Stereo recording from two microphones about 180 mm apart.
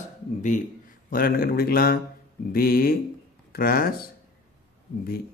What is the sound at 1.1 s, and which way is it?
Speech, 55° left (ahead or behind).